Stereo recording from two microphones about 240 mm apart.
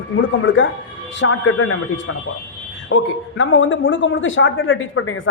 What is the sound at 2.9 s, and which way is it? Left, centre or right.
Speech, left.